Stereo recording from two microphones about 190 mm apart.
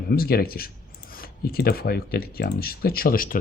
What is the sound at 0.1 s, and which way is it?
Speech, 50° left (ahead or behind).